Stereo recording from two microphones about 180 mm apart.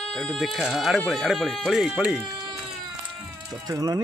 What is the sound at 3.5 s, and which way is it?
Speech, 20° right (ahead or behind).